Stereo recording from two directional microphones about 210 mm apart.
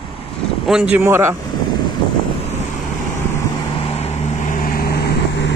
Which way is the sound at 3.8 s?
30° left (ahead or behind).